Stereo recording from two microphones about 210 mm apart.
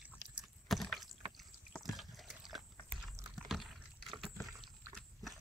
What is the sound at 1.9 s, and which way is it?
Dog, centre (ahead or behind).